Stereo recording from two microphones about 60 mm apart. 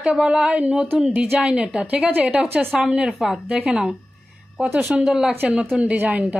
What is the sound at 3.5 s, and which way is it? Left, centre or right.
Speech, centre.